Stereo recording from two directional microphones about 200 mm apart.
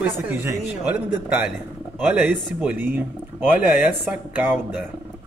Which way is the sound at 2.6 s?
10° right (ahead or behind).